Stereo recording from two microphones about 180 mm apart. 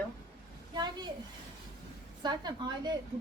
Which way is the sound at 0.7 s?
25° right (ahead or behind).